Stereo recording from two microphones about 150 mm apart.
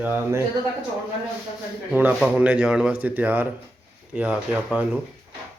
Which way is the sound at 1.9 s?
10° right (ahead or behind).